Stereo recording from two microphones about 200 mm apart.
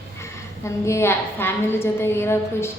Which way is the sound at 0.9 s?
15° left (ahead or behind).